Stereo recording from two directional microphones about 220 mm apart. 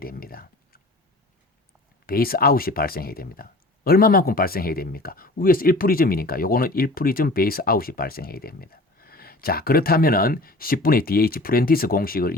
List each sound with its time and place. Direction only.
0.0 s speech: 40° left (ahead or behind)
2.0 s speech: 40° left (ahead or behind)